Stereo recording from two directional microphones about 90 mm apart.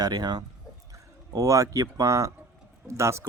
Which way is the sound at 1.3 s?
35° right (ahead or behind).